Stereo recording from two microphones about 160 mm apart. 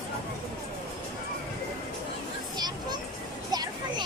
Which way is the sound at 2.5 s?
25° right (ahead or behind).